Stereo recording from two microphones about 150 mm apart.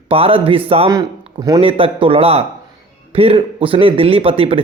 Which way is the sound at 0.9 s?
25° right (ahead or behind).